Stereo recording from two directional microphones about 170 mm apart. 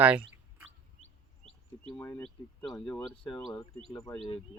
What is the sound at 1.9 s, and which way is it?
Speech, 20° left (ahead or behind).